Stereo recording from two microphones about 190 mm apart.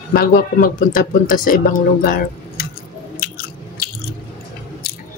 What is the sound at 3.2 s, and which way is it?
Biting, 50° left (ahead or behind).